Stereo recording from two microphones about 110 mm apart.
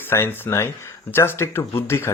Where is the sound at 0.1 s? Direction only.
20° left (ahead or behind).